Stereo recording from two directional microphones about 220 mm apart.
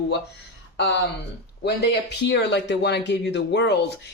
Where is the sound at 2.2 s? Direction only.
50° left (ahead or behind).